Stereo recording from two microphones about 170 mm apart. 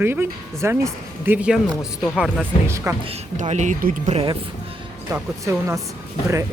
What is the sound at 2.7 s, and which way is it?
Speech, 15° right (ahead or behind).